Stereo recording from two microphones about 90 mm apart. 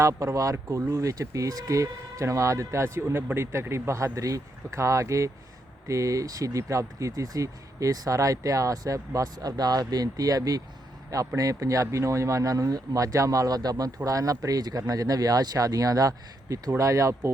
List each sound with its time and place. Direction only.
0.0 s speech: 35° right (ahead or behind)